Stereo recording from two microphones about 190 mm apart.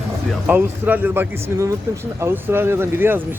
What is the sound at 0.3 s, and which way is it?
Speech, 5° right (ahead or behind).